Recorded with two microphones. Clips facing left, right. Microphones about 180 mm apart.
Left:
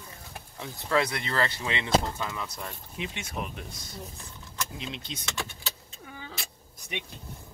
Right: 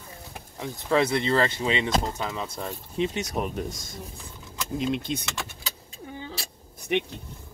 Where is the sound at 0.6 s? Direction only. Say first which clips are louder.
Right 4 dB; 20° right (ahead or behind); by 3.8 s 45° right (ahead or behind).